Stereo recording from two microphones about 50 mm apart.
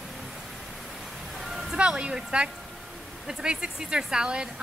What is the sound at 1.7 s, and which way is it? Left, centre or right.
A woman's voice, centre.